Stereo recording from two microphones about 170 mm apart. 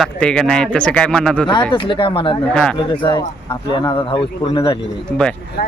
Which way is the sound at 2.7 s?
25° left (ahead or behind).